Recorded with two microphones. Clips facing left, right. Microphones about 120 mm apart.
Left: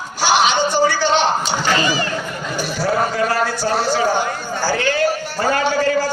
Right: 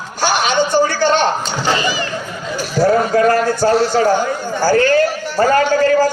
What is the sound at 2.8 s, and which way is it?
A man's voice, 50° right (ahead or behind).